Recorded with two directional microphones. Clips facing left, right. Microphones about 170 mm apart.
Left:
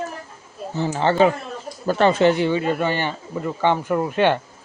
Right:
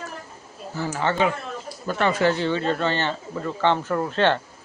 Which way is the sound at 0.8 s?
30° left (ahead or behind).